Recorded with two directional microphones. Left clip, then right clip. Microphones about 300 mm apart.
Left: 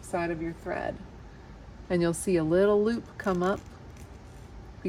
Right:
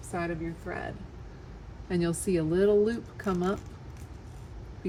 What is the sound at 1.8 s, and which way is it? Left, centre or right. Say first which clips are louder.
Speech: left 3 dB; centre.